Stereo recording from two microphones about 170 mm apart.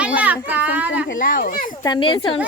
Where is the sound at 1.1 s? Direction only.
55° left (ahead or behind).